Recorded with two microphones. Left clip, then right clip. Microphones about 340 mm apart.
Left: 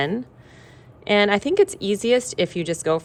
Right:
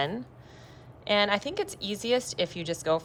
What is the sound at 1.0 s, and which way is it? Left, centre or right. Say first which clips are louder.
Speech: left 7 dB; centre.